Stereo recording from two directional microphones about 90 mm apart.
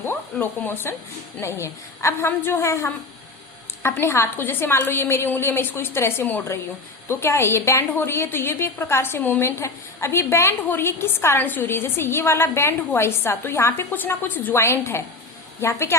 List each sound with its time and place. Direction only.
0.0 s a woman's voice: 25° left (ahead or behind)